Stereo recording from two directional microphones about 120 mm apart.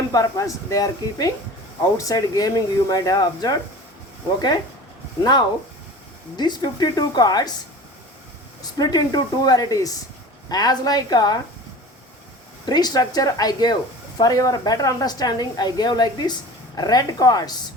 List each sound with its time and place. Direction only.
0.1 s speech: 30° left (ahead or behind)
8.8 s speech: 35° left (ahead or behind)
12.6 s speech: 35° left (ahead or behind)